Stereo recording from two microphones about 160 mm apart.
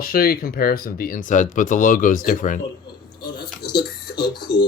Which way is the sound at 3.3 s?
80° left.